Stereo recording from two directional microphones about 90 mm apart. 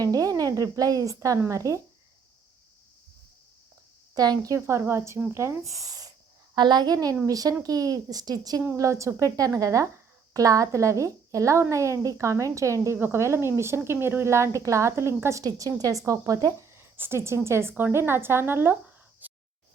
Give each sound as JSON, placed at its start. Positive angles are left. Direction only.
{"t": 0.0, "sound": "a woman's voice", "side_deg": -40}
{"t": 4.1, "sound": "a child's voice", "side_deg": -45}
{"t": 4.5, "sound": "a woman's voice", "side_deg": -30}
{"t": 6.6, "sound": "a child's voice", "side_deg": -55}
{"t": 8.6, "sound": "a woman's voice", "side_deg": -35}
{"t": 16.7, "sound": "speech", "side_deg": -25}
{"t": 19.2, "sound": "a sound", "side_deg": -20}